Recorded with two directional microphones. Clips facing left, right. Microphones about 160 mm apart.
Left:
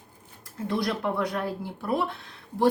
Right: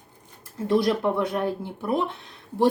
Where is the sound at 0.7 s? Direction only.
25° right (ahead or behind).